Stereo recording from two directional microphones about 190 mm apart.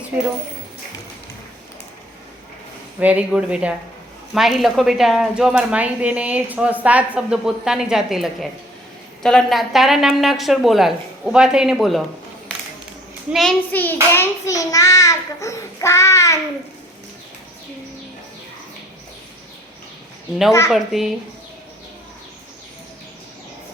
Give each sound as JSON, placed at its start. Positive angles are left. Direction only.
{"t": 3.0, "sound": "a woman's voice", "side_deg": -5}
{"t": 13.3, "sound": "hands", "side_deg": 0}
{"t": 20.7, "sound": "a woman's voice", "side_deg": 0}